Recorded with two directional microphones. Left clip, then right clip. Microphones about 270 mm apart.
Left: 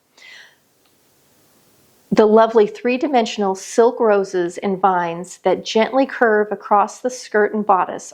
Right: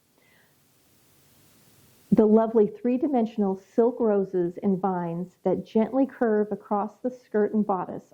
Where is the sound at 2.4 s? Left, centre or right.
Centre.